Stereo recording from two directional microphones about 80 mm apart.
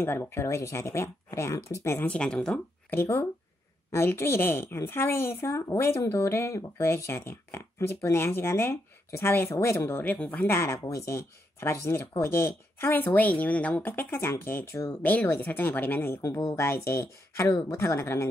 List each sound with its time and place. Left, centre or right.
0.0 s speech: left
2.0 s speech: centre
2.9 s speech: left
10.5 s speech: left
15.0 s speech: centre
16.2 s speech: left
16.5 s speech: left